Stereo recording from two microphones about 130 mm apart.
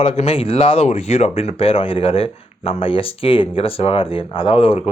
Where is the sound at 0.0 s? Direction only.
50° left (ahead or behind).